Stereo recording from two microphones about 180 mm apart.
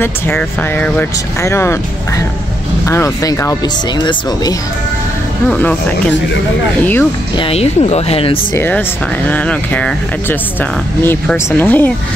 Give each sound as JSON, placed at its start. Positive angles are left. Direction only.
{"t": 0.0, "sound": "speech", "side_deg": 10}
{"t": 2.8, "sound": "speech", "side_deg": 15}
{"t": 5.5, "sound": "speech", "side_deg": 10}
{"t": 7.3, "sound": "speech", "side_deg": 35}
{"t": 8.5, "sound": "speech", "side_deg": 10}